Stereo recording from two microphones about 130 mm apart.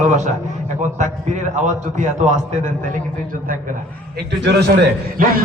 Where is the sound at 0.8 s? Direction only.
70° right (ahead or behind).